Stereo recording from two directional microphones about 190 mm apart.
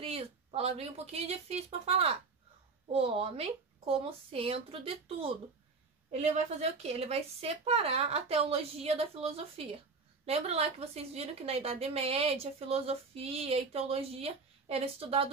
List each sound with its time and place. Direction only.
0.0 s a woman's voice: 30° right (ahead or behind)